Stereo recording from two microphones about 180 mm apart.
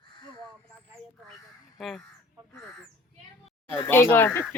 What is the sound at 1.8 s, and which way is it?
Speech, centre (ahead or behind).